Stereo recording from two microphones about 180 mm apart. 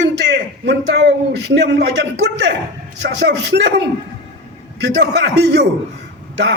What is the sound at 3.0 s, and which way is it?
Speech, 70° right (ahead or behind).